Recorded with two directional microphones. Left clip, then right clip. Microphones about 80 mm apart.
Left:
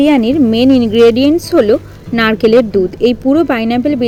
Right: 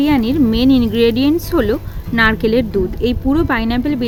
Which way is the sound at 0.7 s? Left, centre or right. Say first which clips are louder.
Left 6 dB; centre.